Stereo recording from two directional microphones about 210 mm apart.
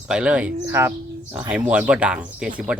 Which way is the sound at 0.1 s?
5° right (ahead or behind).